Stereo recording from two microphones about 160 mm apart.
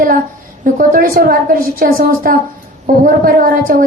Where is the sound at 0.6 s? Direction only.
60° right (ahead or behind).